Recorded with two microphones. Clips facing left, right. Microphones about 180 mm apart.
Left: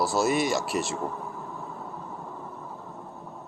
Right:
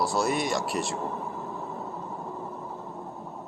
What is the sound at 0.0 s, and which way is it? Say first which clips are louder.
Speech: left 2 dB; centre (ahead or behind).